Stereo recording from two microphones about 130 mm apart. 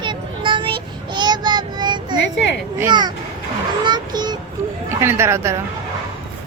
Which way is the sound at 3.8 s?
35° right (ahead or behind).